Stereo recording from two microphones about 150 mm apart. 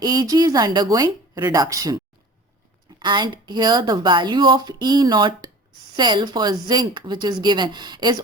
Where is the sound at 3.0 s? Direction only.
30° right (ahead or behind).